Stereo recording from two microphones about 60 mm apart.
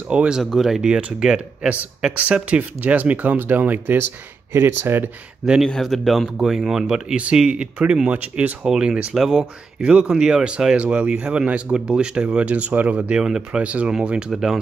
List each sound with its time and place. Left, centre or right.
0.1 s speech: centre
0.4 s speech: centre
2.5 s speech: right
5.8 s speech: centre
6.3 s speech: centre; by 8.5 s right
8.6 s speech: centre
14.3 s speech: centre